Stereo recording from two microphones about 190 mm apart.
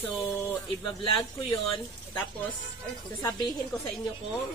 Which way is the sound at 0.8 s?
25° left (ahead or behind).